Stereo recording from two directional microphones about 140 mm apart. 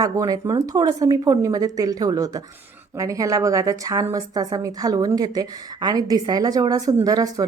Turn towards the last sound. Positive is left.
turn(degrees=-25)  # may be behind; listen again after turning